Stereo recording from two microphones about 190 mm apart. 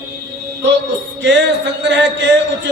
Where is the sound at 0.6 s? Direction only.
65° right (ahead or behind).